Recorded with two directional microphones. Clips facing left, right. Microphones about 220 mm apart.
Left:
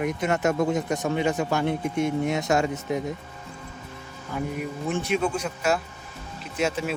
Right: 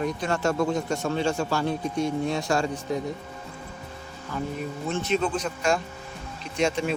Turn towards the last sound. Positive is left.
turn(degrees=5)  # may be behind; listen again after turning